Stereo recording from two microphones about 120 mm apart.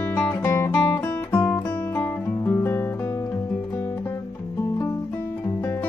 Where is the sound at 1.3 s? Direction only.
25° left (ahead or behind).